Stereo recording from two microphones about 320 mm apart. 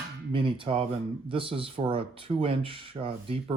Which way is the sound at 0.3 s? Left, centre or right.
Centre.